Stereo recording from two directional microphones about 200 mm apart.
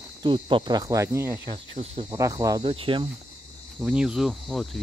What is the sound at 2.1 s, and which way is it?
Speech, 15° right (ahead or behind).